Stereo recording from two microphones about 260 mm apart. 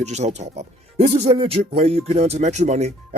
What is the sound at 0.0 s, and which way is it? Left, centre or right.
Speech, right.